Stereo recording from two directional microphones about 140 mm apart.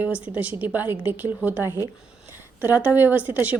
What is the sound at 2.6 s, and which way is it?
Speech, 15° right (ahead or behind).